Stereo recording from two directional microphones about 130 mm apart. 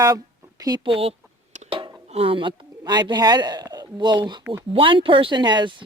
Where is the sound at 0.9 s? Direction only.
45° right (ahead or behind).